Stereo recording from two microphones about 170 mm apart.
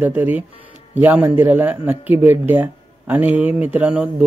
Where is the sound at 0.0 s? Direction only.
10° right (ahead or behind).